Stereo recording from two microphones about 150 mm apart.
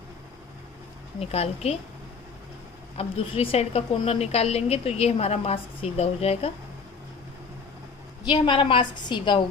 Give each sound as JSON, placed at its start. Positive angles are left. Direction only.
{"t": 1.2, "sound": "a woman's voice", "side_deg": 45}
{"t": 3.0, "sound": "a woman's voice", "side_deg": 40}
{"t": 8.2, "sound": "a woman's voice", "side_deg": 30}